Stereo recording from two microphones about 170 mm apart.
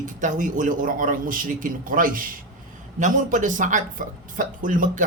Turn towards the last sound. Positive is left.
turn(degrees=-50)  # may be behind; listen again after turning